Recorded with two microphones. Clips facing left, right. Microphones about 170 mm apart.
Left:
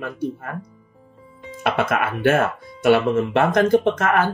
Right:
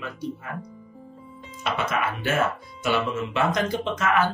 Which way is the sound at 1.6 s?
55° left (ahead or behind).